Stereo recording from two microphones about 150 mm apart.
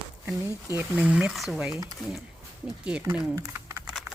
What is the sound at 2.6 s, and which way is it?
Speech, 5° right (ahead or behind).